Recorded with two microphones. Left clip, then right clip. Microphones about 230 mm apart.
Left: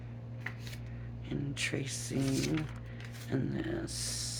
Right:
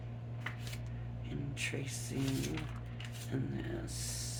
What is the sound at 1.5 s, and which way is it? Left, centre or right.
Speech, left.